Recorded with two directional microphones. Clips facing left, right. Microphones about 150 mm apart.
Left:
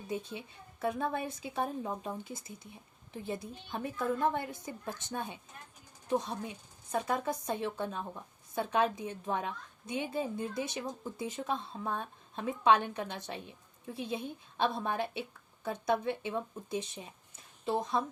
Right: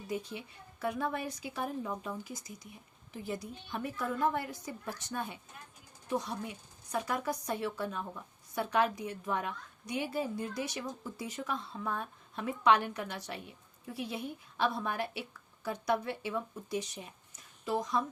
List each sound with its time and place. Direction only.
0.1 s a woman's voice: 25° left (ahead or behind)